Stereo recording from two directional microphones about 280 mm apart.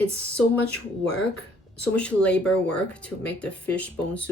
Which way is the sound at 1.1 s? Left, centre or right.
Centre.